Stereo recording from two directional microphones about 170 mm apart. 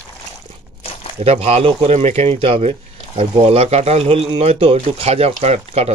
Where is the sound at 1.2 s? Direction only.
40° right (ahead or behind).